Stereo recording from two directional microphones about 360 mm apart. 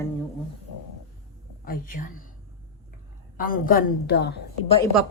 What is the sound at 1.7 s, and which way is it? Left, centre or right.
Speech, left.